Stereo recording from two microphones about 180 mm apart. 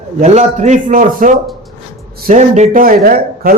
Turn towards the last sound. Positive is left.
turn(degrees=-55)  # may be behind; listen again after turning